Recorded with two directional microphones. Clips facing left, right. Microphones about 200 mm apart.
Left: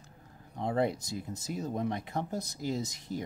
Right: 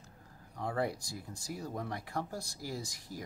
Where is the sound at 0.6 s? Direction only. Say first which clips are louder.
Left 5 dB; 20° left (ahead or behind).